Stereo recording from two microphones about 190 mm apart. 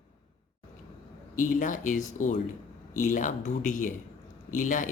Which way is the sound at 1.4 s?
45° left (ahead or behind).